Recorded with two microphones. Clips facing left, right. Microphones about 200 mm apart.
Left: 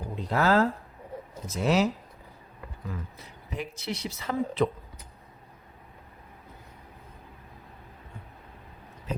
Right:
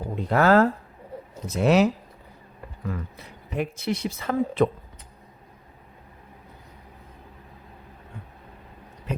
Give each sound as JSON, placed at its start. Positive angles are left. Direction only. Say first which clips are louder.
{"t": 0.2, "sound": "speech", "louder": "right 5 dB", "side_deg": -60}